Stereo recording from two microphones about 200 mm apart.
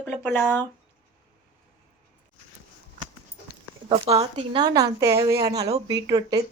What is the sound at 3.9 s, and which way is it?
A woman's voice, 25° right (ahead or behind).